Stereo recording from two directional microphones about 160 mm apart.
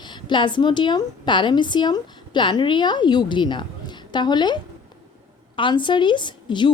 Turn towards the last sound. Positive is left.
turn(degrees=30)  # may be behind; listen again after turning